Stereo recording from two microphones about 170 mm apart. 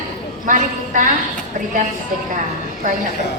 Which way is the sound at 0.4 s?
50° right (ahead or behind).